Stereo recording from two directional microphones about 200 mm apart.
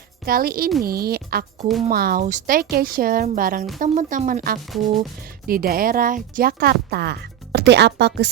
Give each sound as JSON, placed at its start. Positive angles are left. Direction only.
{"t": 0.3, "sound": "speech", "side_deg": -50}